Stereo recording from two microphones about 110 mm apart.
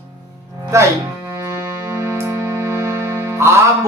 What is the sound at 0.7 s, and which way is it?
Music, 25° right (ahead or behind).